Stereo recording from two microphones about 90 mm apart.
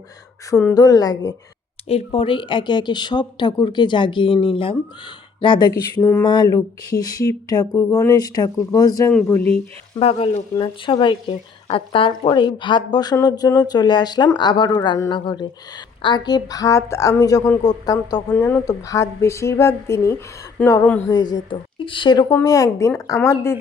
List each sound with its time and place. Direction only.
0.7 s speech: 45° left (ahead or behind)
1.9 s speech: 90° left
5.4 s speech: 60° left (ahead or behind)
6.0 s speech: 40° left (ahead or behind)
6.2 s speech: 50° left (ahead or behind)
9.9 s speech: 90° left
10.5 s speech: 65° left (ahead or behind); by 18.2 s 45° left (ahead or behind)
18.3 s speech: 15° left (ahead or behind)
18.6 s speech: 40° left (ahead or behind)
20.6 s speech: 15° left (ahead or behind)
21.1 s speech: 50° left (ahead or behind)
21.5 s speech: 70° left (ahead or behind)
22.4 s speech: 40° left (ahead or behind)